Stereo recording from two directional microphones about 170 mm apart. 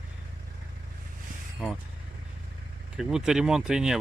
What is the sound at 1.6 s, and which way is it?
Speech, 5° right (ahead or behind).